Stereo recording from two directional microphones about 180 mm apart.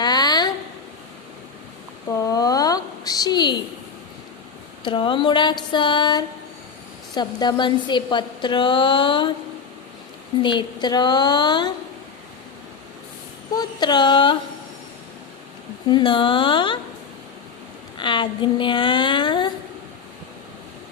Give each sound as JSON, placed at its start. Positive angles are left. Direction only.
{"t": 0.0, "sound": "a sound", "side_deg": 20}
{"t": 2.2, "sound": "a sound", "side_deg": 20}
{"t": 4.8, "sound": "a woman's voice", "side_deg": 25}
{"t": 10.4, "sound": "a woman's voice", "side_deg": 25}
{"t": 13.6, "sound": "speech", "side_deg": 25}
{"t": 15.9, "sound": "a woman's voice", "side_deg": 25}
{"t": 17.9, "sound": "a woman's voice", "side_deg": 25}